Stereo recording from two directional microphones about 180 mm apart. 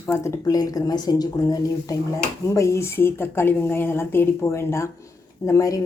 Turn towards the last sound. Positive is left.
turn(degrees=20)  # may be behind; listen again after turning